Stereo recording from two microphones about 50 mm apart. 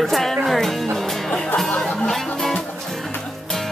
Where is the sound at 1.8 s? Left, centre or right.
Centre.